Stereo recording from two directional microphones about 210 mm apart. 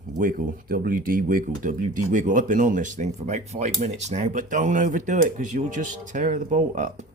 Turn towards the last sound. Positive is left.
turn(degrees=-35)  # may be behind; listen again after turning